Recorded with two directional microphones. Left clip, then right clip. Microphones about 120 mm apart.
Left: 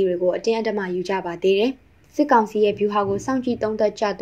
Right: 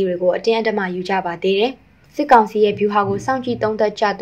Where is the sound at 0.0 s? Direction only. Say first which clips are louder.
Right 3 dB; 40° left (ahead or behind).